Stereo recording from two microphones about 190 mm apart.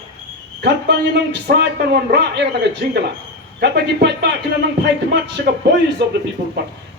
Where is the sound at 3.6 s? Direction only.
60° right (ahead or behind).